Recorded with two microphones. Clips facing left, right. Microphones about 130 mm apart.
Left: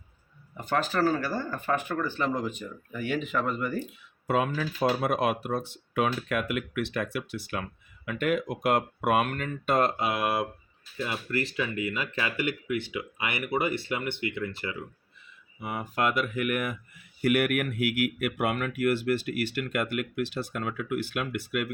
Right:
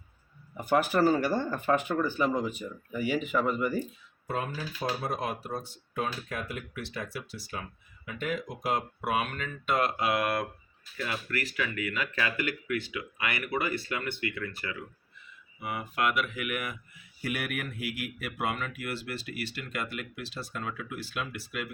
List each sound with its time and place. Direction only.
0.5 s speech: 10° right (ahead or behind)
4.3 s speech: 90° left; by 9.9 s 40° left (ahead or behind)
10.0 s speech: 15° left (ahead or behind)
10.9 s speech: 25° left (ahead or behind)
15.6 s speech: 35° left (ahead or behind)
17.2 s speech: 60° left (ahead or behind)